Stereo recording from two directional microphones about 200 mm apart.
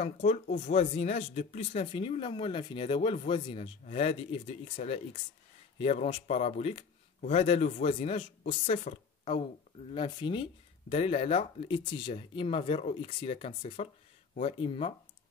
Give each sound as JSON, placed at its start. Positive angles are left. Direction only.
{"t": 0.0, "sound": "speech", "side_deg": 35}